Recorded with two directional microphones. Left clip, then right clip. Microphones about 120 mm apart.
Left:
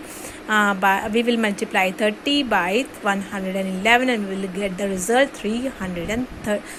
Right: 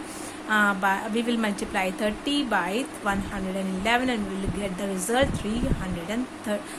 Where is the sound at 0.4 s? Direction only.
35° left (ahead or behind).